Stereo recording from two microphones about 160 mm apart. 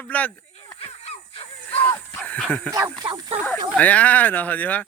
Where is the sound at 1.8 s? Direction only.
10° left (ahead or behind).